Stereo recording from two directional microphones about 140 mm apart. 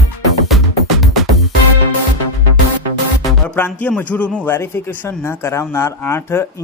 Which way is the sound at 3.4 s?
10° left (ahead or behind).